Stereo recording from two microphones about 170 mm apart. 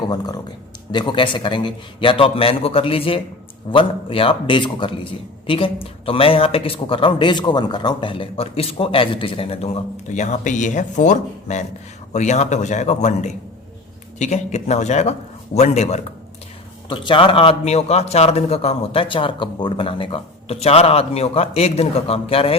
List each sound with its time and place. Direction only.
0.0 s a man's voice: 25° left (ahead or behind); by 16.0 s 40° left (ahead or behind)
16.9 s speech: 30° left (ahead or behind)